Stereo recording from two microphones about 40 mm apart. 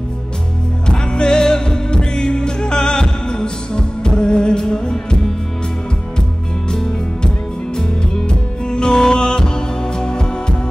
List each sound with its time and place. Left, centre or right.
0.8 s music: left
7.7 s music: centre